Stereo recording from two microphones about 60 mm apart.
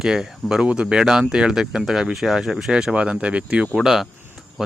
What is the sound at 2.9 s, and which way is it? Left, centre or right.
Speech, centre.